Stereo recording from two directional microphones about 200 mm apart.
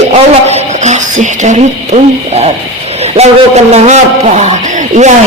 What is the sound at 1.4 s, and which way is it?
Speech, 35° right (ahead or behind).